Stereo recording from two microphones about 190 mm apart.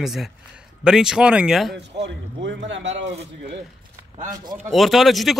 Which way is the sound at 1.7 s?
65° right (ahead or behind).